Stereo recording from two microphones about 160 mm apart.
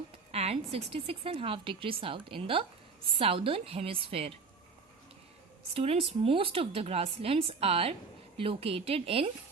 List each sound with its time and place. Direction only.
0.3 s speech: 40° right (ahead or behind)
5.7 s speech: 40° right (ahead or behind)